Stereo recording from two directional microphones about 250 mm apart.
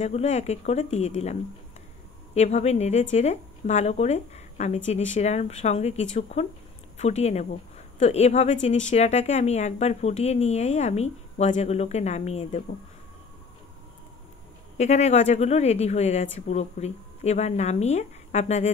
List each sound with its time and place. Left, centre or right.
0.0 s speech: left
2.3 s speech: left
14.8 s speech: left